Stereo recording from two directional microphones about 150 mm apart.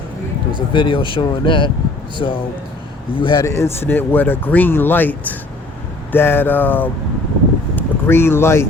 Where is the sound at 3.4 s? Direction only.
20° left (ahead or behind).